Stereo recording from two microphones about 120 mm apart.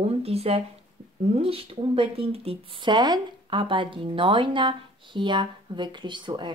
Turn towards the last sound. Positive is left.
turn(degrees=-40)  # may be behind; listen again after turning